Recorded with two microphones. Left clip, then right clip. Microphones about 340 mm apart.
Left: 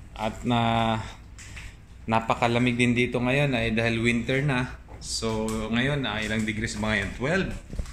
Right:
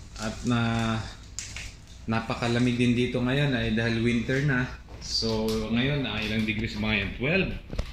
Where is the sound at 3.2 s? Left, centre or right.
Centre.